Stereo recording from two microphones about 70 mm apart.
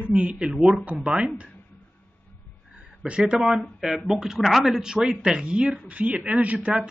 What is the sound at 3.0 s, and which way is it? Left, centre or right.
Speech, centre.